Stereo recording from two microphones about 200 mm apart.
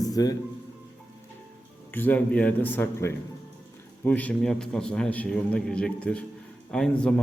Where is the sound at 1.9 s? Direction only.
10° left (ahead or behind).